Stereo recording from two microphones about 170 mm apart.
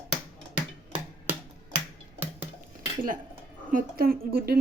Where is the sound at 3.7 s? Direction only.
55° right (ahead or behind).